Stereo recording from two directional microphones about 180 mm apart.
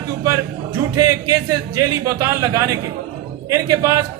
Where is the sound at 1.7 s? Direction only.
15° right (ahead or behind).